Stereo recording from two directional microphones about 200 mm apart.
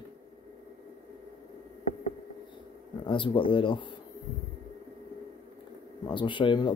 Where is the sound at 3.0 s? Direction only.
25° left (ahead or behind).